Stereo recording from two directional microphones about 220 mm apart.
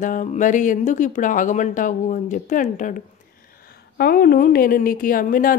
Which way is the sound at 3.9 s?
45° left (ahead or behind).